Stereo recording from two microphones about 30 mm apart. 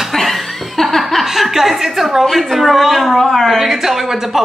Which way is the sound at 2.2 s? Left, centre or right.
Centre.